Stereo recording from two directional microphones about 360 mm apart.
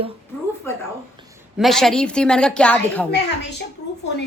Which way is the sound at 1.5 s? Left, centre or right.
Centre.